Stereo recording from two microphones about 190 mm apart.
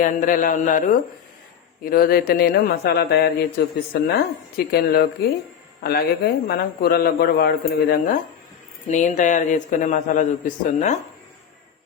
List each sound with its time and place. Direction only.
0.0 s a man's voice: 45° left (ahead or behind)